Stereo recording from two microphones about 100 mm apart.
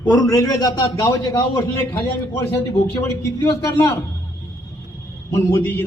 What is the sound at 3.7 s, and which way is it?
Speech, 30° left (ahead or behind).